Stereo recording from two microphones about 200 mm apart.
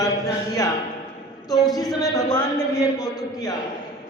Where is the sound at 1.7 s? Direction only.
20° left (ahead or behind).